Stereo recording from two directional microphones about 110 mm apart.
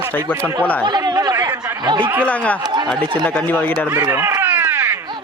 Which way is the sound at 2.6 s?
40° right (ahead or behind).